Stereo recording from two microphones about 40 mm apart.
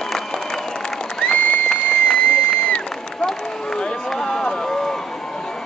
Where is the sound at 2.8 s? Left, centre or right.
Centre.